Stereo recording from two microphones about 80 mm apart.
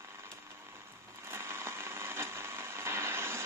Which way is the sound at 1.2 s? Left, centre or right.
Right.